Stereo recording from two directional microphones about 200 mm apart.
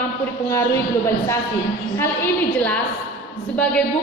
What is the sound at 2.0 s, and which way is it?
A woman's voice, 10° left (ahead or behind).